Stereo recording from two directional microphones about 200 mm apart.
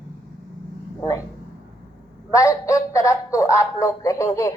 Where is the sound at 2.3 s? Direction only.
15° left (ahead or behind).